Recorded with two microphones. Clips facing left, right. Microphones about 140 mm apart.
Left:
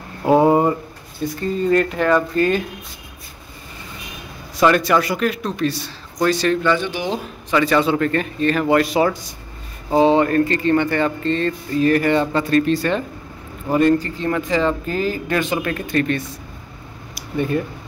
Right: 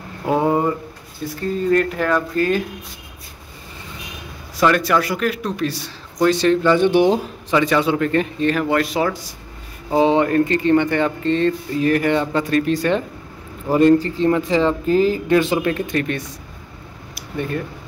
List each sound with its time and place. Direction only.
0.3 s a sound: 15° left (ahead or behind)
1.2 s speech: 5° right (ahead or behind)
4.6 s speech: centre (ahead or behind)
6.3 s speech: 25° right (ahead or behind)
6.8 s speech: 55° right (ahead or behind)
7.1 s speech: 15° right (ahead or behind)
8.5 s speech: 5° left (ahead or behind)
9.9 s speech: 15° right (ahead or behind)
16.0 s speech: 10° right (ahead or behind)
17.1 s a sound: 5° left (ahead or behind)